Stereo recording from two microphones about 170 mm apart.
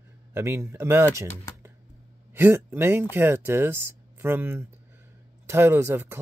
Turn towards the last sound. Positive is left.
turn(degrees=-15)  # may be behind; listen again after turning